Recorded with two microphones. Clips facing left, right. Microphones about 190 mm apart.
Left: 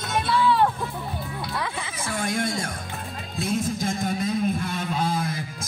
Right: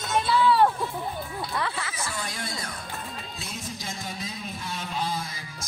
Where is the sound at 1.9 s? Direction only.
55° left (ahead or behind).